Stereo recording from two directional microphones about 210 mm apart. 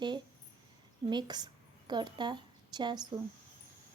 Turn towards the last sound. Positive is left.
turn(degrees=-20)  # may be behind; listen again after turning